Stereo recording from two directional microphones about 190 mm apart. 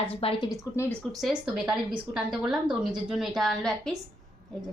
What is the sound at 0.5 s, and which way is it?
Speech, 15° left (ahead or behind).